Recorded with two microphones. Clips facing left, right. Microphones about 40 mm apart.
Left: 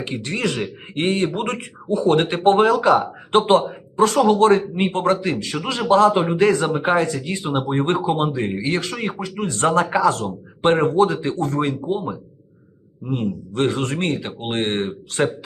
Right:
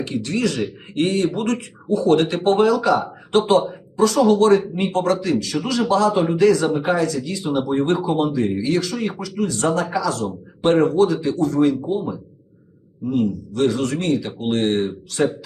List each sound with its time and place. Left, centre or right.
0.0 s a man's voice: left